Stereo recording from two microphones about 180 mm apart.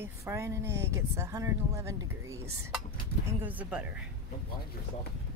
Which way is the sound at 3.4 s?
10° right (ahead or behind).